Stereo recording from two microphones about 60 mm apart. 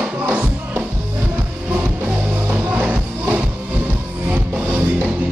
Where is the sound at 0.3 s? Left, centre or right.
Right.